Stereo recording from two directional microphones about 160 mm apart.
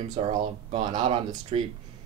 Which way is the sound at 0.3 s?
45° right (ahead or behind).